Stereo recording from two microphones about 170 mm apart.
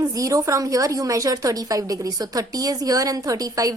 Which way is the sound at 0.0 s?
20° right (ahead or behind).